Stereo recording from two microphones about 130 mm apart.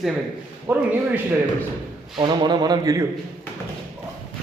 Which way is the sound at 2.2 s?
35° right (ahead or behind).